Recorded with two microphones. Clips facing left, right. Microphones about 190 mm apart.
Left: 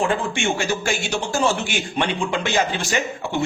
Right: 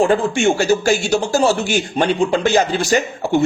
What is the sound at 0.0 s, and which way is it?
Speech, 40° right (ahead or behind).